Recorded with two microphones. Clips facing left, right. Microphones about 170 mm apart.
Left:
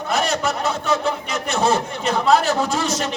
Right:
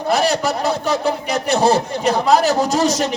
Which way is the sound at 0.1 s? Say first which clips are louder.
Right 4 dB; 35° right (ahead or behind).